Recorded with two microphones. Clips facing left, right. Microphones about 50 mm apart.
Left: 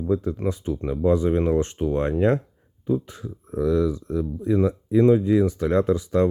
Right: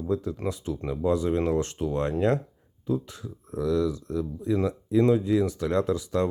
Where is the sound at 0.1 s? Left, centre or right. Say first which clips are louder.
Left 4 dB; left.